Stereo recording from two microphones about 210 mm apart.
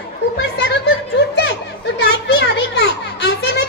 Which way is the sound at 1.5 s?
55° left (ahead or behind).